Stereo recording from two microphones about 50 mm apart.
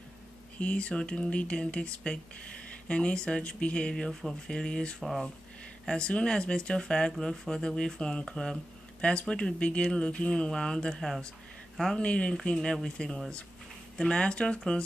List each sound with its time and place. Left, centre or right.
0.6 s speech: left; by 12.0 s centre
12.0 s speech: left